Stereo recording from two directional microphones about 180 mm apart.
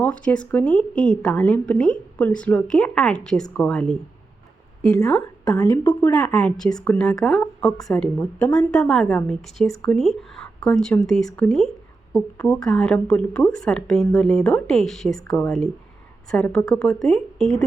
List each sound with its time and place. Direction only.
0.0 s a woman's voice: 5° left (ahead or behind)
4.9 s a woman's voice: 20° left (ahead or behind)
5.7 s a woman's voice: 10° left (ahead or behind)